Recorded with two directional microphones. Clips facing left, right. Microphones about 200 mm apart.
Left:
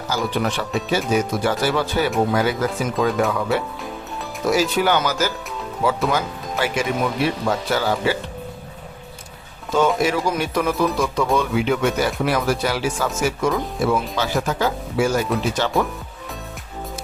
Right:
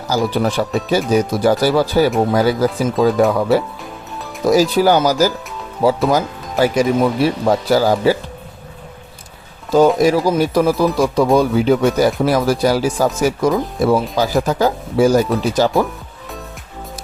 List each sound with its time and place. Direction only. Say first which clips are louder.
0.3 s speech: right 5 dB; 35° right (ahead or behind)
10.0 s speech: right 7 dB; 35° right (ahead or behind)